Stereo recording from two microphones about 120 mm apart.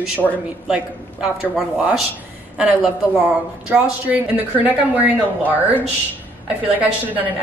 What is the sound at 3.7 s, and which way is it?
Speech, 10° right (ahead or behind).